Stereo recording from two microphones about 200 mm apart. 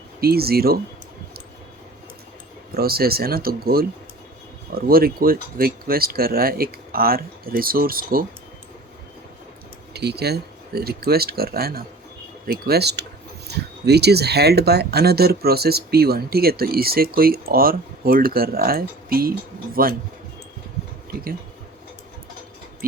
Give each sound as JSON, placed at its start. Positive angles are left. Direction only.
{"t": 0.2, "sound": "speech", "side_deg": -50}
{"t": 2.7, "sound": "speech", "side_deg": -50}
{"t": 9.9, "sound": "speech", "side_deg": -55}
{"t": 22.8, "sound": "speech", "side_deg": -45}